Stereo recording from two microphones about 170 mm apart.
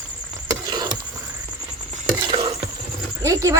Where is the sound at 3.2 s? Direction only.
20° right (ahead or behind).